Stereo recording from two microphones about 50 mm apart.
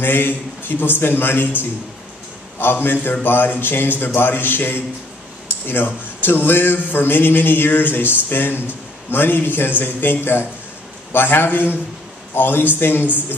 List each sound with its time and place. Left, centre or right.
0.0 s speech: left
6.2 s speech: left